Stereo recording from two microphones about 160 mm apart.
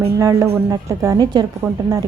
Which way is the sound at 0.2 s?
20° right (ahead or behind).